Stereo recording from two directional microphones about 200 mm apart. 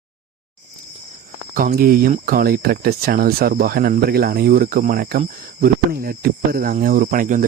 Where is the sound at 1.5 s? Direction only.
45° right (ahead or behind).